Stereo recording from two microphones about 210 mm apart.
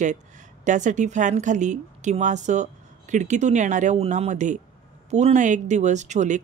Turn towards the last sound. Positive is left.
turn(degrees=-35)  # may be behind; listen again after turning